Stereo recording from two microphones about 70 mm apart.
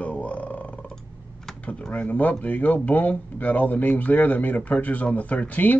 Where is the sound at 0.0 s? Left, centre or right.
Centre.